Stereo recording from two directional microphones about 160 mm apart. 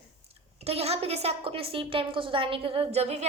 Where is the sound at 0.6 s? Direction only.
40° right (ahead or behind).